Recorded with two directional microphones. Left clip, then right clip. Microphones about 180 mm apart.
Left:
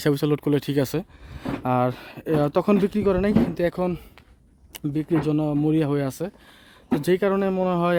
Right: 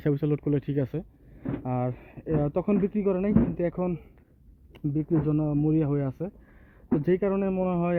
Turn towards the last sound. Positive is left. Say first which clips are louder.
# left 5 dB
turn(degrees=35)  # may be behind; listen again after turning